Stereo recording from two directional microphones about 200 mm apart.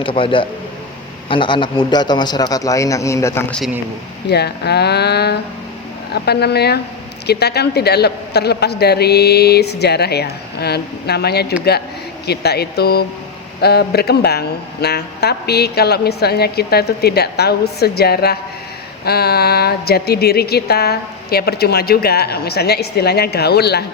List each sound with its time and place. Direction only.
0.0 s a man's voice: 25° left (ahead or behind)
4.3 s a man's voice: 55° left (ahead or behind)